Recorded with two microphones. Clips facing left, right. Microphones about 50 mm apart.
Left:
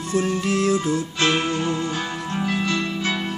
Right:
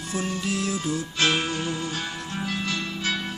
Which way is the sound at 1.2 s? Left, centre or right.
Left.